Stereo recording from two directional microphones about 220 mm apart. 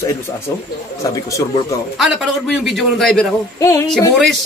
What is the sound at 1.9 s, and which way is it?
A man's voice, centre (ahead or behind).